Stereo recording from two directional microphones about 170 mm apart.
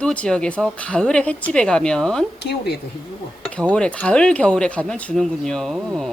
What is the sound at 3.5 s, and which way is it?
Speech, 5° left (ahead or behind).